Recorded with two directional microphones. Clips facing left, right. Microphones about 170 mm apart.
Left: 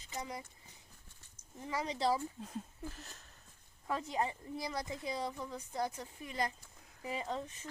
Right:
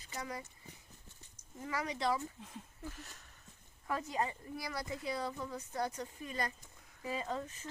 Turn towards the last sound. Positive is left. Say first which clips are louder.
# even
turn(degrees=20)  # may be behind; listen again after turning